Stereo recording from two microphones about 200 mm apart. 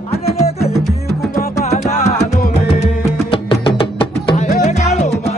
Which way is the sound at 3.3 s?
25° left (ahead or behind).